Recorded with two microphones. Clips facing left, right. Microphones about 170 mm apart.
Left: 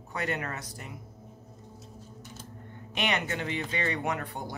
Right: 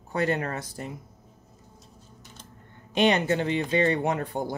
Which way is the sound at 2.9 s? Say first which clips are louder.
Right 9 dB; 30° right (ahead or behind).